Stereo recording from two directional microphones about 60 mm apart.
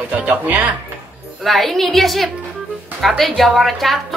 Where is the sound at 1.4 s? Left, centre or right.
Centre.